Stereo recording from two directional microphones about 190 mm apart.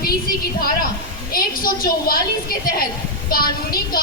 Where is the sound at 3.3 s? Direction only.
50° left (ahead or behind).